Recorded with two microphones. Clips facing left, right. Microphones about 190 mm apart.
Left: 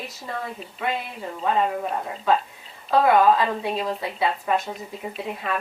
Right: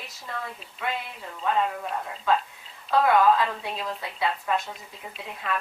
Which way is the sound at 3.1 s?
20° left (ahead or behind).